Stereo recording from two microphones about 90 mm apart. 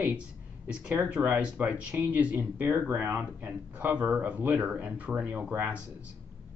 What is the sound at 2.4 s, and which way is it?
Speech, 25° right (ahead or behind).